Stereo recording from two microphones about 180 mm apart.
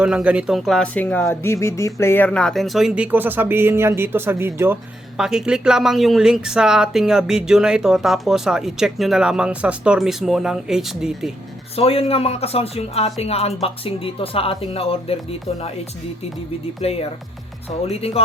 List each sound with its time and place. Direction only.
0.0 s speech: 5° right (ahead or behind)
11.8 s speech: 30° left (ahead or behind)
16.8 s speech: 35° left (ahead or behind)